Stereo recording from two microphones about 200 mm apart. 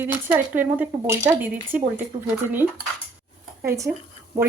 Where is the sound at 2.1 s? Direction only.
20° right (ahead or behind).